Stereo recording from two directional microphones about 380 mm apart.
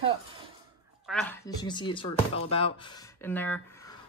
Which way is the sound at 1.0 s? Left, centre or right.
Centre.